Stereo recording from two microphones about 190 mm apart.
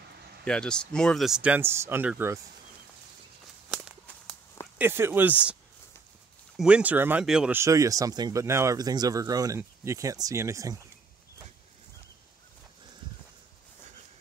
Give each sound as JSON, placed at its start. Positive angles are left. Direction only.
{"t": 0.5, "sound": "speech", "side_deg": 5}
{"t": 3.7, "sound": "walk", "side_deg": 0}
{"t": 4.7, "sound": "speech", "side_deg": -10}